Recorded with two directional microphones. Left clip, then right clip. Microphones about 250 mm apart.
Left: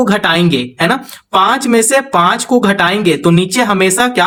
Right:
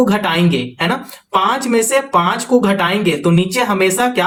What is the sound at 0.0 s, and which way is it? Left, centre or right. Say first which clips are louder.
A woman's voice: left 3 dB; left.